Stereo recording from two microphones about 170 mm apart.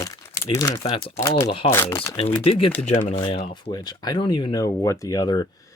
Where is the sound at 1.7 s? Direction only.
15° left (ahead or behind).